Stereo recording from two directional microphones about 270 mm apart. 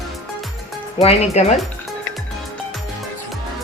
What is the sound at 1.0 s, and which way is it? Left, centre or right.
Speech, left.